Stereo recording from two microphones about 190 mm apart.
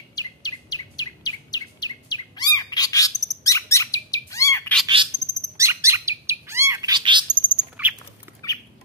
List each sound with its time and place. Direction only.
0.1 s chirp: 20° left (ahead or behind)
4.8 s bird: 25° right (ahead or behind)
8.4 s squawk: 15° left (ahead or behind)